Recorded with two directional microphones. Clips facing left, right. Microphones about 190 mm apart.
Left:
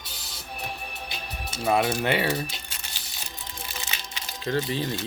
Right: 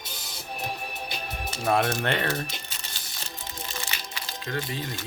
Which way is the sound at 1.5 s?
5° left (ahead or behind).